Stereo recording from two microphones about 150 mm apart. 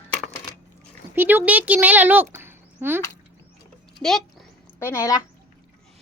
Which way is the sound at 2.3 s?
15° right (ahead or behind).